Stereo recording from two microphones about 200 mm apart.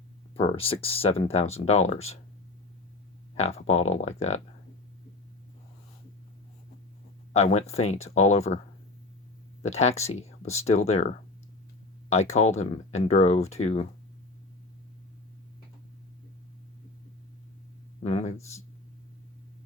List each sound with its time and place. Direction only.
0.3 s speech: 30° left (ahead or behind)
3.3 s speech: 30° left (ahead or behind)
7.3 s speech: 35° left (ahead or behind)
9.6 s speech: 35° left (ahead or behind)
18.0 s a sound: 35° left (ahead or behind)